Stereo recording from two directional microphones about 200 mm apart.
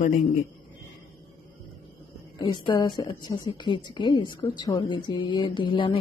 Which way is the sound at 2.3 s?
20° left (ahead or behind).